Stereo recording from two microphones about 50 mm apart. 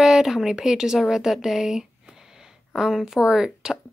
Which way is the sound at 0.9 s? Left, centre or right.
Centre.